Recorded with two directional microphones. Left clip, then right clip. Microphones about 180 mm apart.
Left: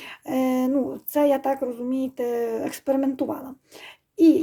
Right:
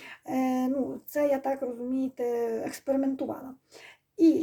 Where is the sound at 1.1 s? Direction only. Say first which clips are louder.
Left 6 dB; 30° left (ahead or behind).